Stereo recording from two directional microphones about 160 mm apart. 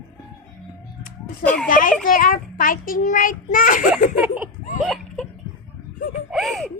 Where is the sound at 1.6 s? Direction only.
55° left (ahead or behind).